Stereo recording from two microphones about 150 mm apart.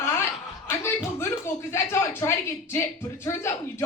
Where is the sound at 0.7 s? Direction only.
20° left (ahead or behind).